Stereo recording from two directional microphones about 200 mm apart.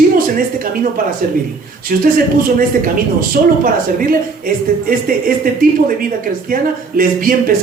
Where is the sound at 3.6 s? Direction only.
45° right (ahead or behind).